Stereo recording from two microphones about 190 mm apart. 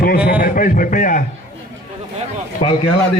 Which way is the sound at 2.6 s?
30° left (ahead or behind).